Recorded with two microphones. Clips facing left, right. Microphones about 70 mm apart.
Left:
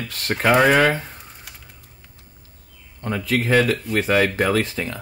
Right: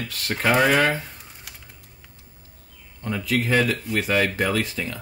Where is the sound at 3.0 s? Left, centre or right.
Left.